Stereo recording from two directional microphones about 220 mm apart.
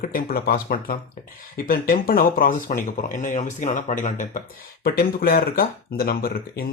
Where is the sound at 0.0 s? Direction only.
40° left (ahead or behind).